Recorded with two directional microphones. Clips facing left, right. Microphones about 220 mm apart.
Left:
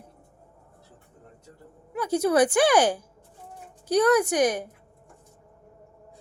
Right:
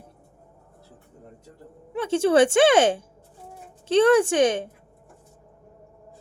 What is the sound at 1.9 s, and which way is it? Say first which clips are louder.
Speech: right 3 dB; 25° right (ahead or behind).